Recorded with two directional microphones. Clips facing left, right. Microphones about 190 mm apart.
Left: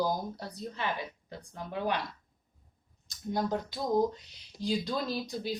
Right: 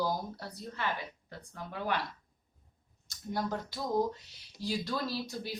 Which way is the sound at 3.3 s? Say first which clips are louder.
Left 3 dB; 20° left (ahead or behind).